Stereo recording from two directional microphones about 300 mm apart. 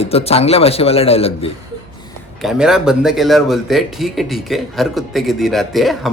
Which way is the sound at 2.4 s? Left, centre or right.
Centre.